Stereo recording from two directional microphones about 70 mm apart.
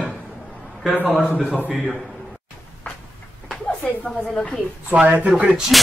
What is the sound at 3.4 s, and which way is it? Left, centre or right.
Speech, centre.